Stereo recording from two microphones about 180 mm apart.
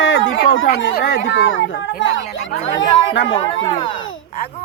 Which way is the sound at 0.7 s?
70° left (ahead or behind).